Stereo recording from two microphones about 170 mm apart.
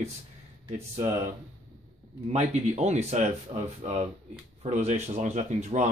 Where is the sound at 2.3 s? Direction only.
40° right (ahead or behind).